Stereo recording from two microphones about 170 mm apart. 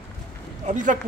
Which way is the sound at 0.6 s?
50° right (ahead or behind).